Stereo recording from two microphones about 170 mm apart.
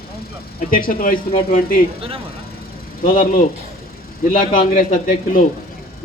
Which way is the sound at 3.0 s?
55° left (ahead or behind).